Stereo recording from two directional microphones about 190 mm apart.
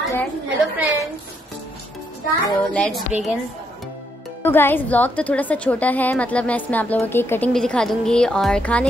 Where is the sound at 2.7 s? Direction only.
5° left (ahead or behind).